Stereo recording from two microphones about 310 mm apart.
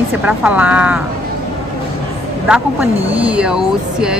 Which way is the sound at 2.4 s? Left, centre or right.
Centre.